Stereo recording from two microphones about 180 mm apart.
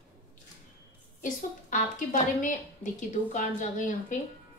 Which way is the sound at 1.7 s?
45° left (ahead or behind).